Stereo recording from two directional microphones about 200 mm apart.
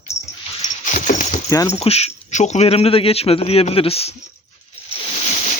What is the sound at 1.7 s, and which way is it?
Speech, 30° left (ahead or behind).